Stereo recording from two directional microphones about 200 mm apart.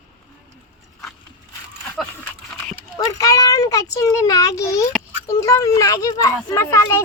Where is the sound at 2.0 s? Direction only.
Centre (ahead or behind).